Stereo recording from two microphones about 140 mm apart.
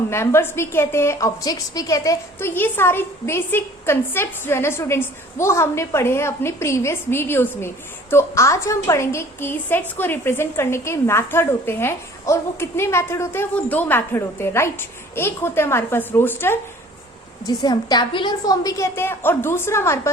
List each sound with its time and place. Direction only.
0.1 s a woman's voice: 20° left (ahead or behind)
17.4 s a woman's voice: 25° left (ahead or behind)